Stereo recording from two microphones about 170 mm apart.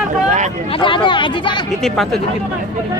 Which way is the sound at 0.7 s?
30° left (ahead or behind).